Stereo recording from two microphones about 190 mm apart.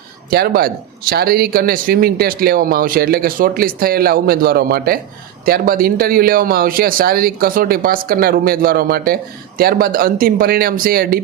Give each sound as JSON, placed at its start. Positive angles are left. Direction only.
{"t": 0.3, "sound": "speech", "side_deg": -55}